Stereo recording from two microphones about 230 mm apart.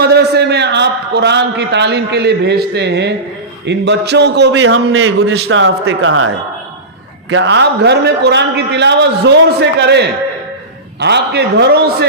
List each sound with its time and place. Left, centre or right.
0.0 s a man's voice: right
7.3 s a man's voice: right